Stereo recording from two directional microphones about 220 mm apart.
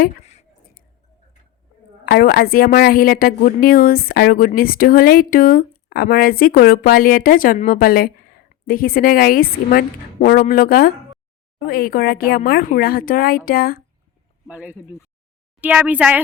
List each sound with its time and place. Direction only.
0.0 s a sound: 35° left (ahead or behind)
2.0 s a woman's voice: 45° left (ahead or behind)
14.4 s a woman's voice: 5° right (ahead or behind)